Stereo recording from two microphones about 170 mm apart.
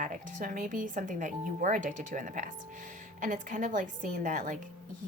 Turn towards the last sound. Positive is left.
turn(degrees=-50)  # may be behind; listen again after turning